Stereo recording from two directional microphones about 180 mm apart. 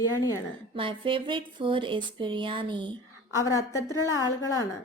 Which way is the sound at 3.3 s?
15° left (ahead or behind).